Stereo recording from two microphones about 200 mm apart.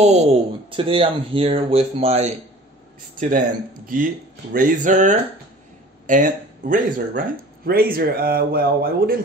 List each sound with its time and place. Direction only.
0.0 s speech: 30° right (ahead or behind)
3.2 s speech: 40° right (ahead or behind)